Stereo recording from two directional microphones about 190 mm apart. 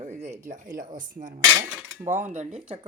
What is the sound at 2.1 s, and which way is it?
Cutlery, 10° right (ahead or behind).